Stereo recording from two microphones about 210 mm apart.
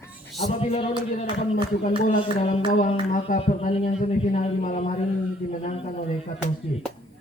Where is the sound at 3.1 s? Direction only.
40° left (ahead or behind).